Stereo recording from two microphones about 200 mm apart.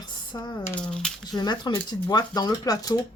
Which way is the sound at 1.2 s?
20° left (ahead or behind).